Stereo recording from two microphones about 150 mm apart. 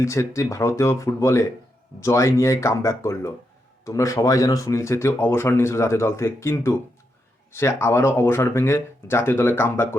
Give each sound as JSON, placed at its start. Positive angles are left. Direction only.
{"t": 0.0, "sound": "speech", "side_deg": 20}